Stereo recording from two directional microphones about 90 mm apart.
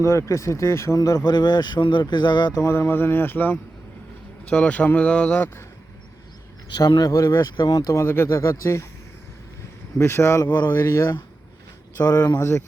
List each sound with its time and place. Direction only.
0.0 s speech: 30° left (ahead or behind); by 2.6 s 55° left (ahead or behind)
2.6 s speech: 30° left (ahead or behind); by 5.5 s 15° left (ahead or behind)
6.7 s speech: 50° left (ahead or behind)
7.4 s speech: 55° left (ahead or behind)
7.7 s speech: 40° left (ahead or behind)
10.0 s speech: 30° left (ahead or behind)
10.4 s speech: 50° left (ahead or behind)
10.7 s speech: 35° left (ahead or behind)
11.9 s speech: 45° left (ahead or behind)
12.4 s speech: 30° left (ahead or behind)